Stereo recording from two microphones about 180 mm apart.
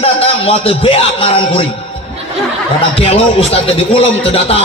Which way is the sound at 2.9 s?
30° left (ahead or behind).